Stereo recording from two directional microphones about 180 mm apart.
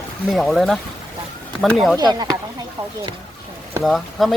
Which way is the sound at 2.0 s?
20° right (ahead or behind).